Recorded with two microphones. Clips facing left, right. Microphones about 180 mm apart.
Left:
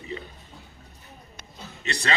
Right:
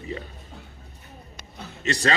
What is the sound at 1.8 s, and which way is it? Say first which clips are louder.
Speech: right 6 dB; 45° right (ahead or behind).